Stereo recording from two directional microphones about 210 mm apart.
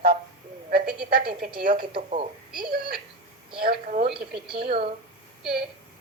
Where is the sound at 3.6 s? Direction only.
40° right (ahead or behind).